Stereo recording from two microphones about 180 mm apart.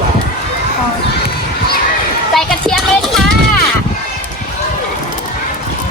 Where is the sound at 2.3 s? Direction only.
Centre (ahead or behind).